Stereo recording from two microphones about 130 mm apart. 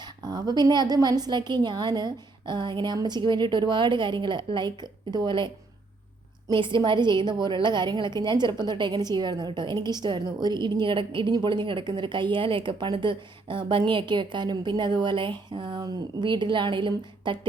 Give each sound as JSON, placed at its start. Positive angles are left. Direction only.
{"t": 0.0, "sound": "a woman's voice", "side_deg": -30}
{"t": 6.5, "sound": "a woman's voice", "side_deg": -40}